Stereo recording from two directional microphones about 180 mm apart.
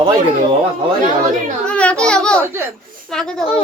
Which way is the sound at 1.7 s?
5° left (ahead or behind).